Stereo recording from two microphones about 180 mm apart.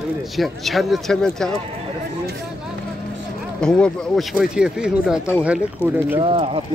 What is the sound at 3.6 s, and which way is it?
Speech, 5° left (ahead or behind).